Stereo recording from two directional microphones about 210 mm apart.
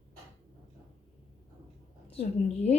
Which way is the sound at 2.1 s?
30° left (ahead or behind).